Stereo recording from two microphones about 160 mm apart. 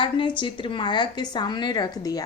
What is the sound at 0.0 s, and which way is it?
A woman's voice, 30° left (ahead or behind).